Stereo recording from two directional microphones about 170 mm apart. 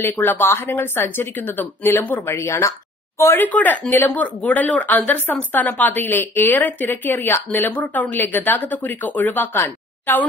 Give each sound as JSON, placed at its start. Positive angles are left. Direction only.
{"t": 0.0, "sound": "speech", "side_deg": 15}